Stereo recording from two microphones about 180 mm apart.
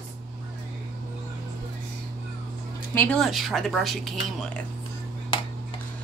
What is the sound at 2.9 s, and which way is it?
Speech, 10° left (ahead or behind).